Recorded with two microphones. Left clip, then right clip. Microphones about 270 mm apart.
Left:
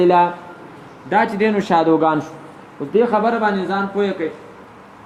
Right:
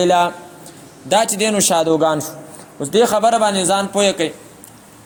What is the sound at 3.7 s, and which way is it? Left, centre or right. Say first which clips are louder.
Speech: right 4 dB; right.